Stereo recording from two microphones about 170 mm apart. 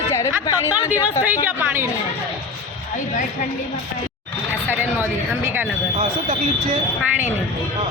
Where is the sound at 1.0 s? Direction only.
10° right (ahead or behind).